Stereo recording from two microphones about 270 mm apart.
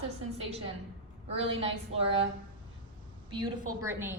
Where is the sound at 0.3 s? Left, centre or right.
Right.